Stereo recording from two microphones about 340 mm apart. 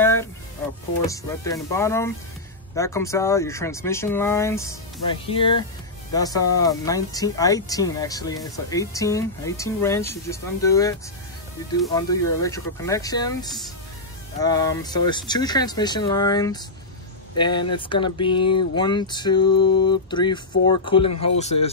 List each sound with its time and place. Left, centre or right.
0.0 s music: centre
1.0 s speech: centre